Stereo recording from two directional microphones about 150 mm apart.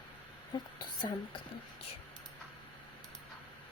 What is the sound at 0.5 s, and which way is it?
Speech, 30° left (ahead or behind).